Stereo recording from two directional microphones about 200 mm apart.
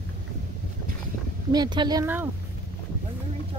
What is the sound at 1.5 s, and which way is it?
Speech, 20° right (ahead or behind).